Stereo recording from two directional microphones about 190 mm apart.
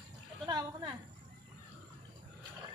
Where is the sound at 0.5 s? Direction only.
20° right (ahead or behind).